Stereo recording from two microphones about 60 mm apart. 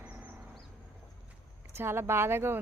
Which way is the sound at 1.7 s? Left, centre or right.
Right.